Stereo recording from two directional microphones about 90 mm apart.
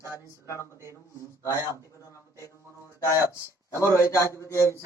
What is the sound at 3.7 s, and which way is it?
A man's voice, 30° left (ahead or behind).